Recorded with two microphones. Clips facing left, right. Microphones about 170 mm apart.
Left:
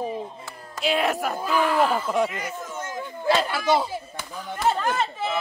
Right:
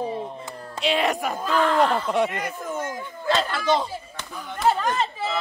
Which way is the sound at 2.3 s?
60° right (ahead or behind).